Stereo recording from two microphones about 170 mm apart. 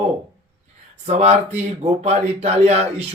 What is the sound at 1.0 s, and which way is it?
Speech, 40° right (ahead or behind).